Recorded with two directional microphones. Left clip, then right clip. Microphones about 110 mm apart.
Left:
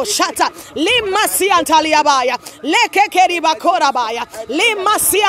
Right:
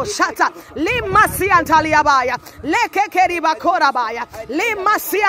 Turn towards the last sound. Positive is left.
turn(degrees=5)  # may be behind; listen again after turning